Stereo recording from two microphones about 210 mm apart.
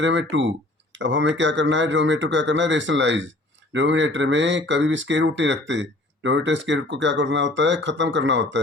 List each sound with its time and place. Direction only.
0.0 s speech: 60° right (ahead or behind)